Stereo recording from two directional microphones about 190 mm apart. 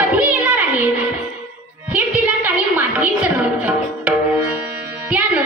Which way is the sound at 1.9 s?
10° right (ahead or behind).